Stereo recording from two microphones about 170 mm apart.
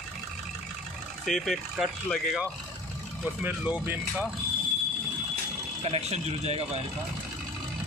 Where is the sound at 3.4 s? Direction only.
10° right (ahead or behind).